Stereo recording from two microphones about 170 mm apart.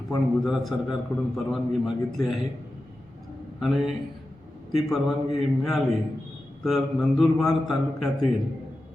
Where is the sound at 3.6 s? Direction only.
Centre (ahead or behind).